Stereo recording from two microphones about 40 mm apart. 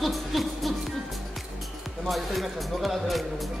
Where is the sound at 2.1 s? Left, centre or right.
Centre.